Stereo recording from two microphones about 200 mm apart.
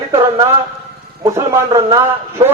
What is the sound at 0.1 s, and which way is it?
Speech, 15° right (ahead or behind).